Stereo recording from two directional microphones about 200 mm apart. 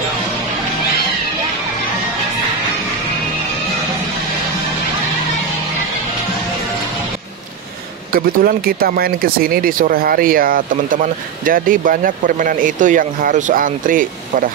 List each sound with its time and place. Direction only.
8.1 s speech: 45° right (ahead or behind)